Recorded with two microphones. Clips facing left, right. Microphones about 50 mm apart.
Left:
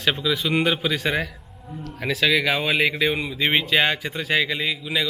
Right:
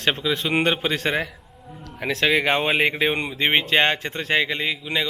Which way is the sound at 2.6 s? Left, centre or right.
Right.